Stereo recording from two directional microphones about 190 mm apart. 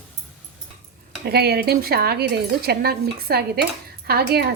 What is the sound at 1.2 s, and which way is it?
A woman's voice, 55° right (ahead or behind).